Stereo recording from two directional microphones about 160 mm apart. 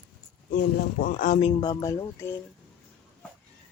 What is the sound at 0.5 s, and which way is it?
Speech, 60° left (ahead or behind).